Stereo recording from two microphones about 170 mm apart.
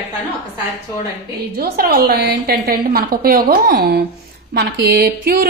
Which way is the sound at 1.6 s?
65° right (ahead or behind).